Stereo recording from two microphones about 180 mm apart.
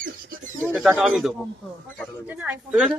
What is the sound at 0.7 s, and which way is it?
A man's voice, 10° right (ahead or behind).